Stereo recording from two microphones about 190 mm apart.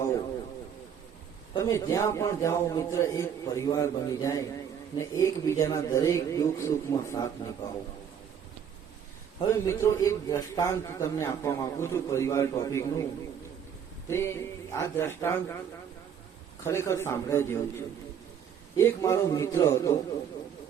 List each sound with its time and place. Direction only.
1.5 s a man's voice: 15° left (ahead or behind)
9.4 s a man's voice: 15° left (ahead or behind)
14.1 s a man's voice: 15° left (ahead or behind)
16.6 s a man's voice: 15° left (ahead or behind)